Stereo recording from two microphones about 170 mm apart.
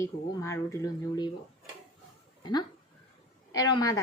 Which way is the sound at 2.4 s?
25° left (ahead or behind).